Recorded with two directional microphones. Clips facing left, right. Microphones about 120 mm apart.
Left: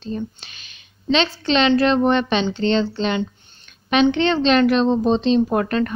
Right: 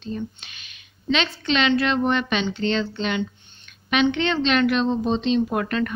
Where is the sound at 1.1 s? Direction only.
30° left (ahead or behind).